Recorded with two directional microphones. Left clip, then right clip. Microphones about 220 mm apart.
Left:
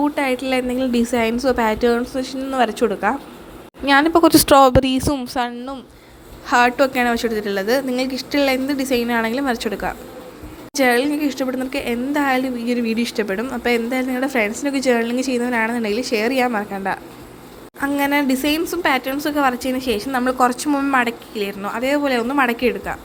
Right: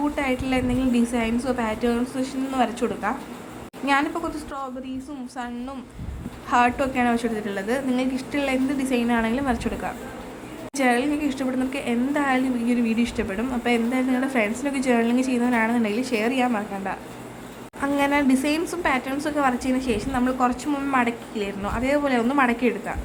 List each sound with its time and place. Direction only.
0.2 s a woman's voice: 20° left (ahead or behind)
4.1 s speech: 40° left (ahead or behind)
5.1 s a woman's voice: 30° left (ahead or behind)
6.5 s a woman's voice: 20° left (ahead or behind)